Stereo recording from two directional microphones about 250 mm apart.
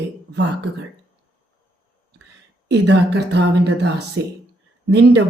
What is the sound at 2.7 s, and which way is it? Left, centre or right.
Speech, right.